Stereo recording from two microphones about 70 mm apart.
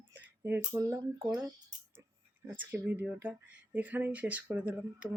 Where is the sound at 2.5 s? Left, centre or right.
Right.